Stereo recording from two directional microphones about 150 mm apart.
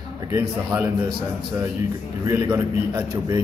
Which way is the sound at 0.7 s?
20° right (ahead or behind).